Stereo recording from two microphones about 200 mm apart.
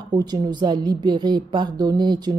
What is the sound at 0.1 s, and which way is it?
A woman's voice, 20° right (ahead or behind).